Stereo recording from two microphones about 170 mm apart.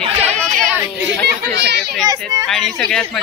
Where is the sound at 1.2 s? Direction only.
80° right.